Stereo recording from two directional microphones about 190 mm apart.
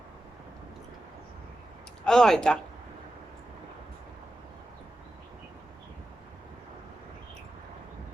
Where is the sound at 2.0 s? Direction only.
5° left (ahead or behind).